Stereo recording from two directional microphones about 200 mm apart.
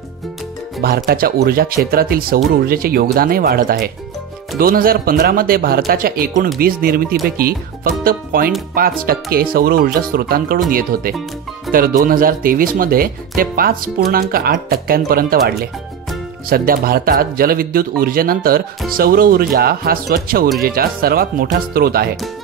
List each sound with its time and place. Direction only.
0.7 s speech: 50° right (ahead or behind)
11.7 s music: centre (ahead or behind)
12.0 s speech: 45° right (ahead or behind)